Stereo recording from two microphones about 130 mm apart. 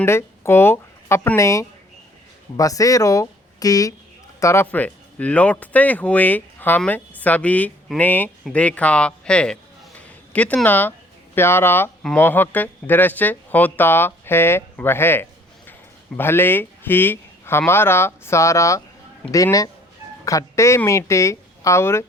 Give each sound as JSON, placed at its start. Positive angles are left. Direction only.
{"t": 0.0, "sound": "speech", "side_deg": 20}